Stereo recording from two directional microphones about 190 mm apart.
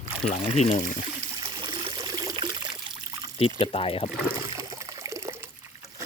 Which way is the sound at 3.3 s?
30° left (ahead or behind).